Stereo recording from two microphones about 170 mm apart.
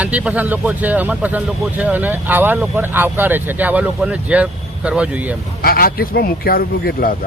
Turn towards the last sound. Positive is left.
turn(degrees=60)  # may be behind; listen again after turning